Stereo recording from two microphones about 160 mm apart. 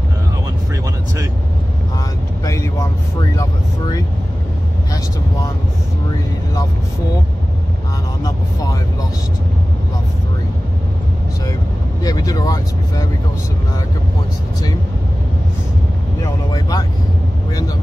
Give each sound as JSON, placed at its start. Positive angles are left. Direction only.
{"t": 2.4, "sound": "vehicle", "side_deg": 20}
{"t": 12.0, "sound": "vehicle", "side_deg": 25}
{"t": 16.2, "sound": "vehicle", "side_deg": 20}